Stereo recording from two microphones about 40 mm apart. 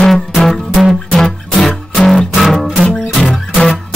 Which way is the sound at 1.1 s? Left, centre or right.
Centre.